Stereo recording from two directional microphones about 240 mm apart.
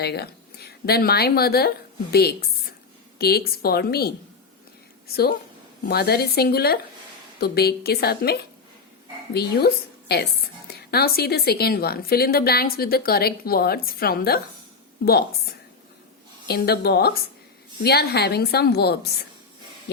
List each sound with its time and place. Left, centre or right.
0.0 s a woman's voice: left